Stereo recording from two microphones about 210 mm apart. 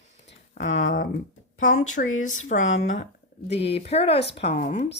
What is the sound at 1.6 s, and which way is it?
Speech, 35° left (ahead or behind).